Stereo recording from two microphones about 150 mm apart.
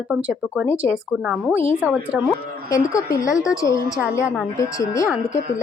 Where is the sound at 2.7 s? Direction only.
20° left (ahead or behind).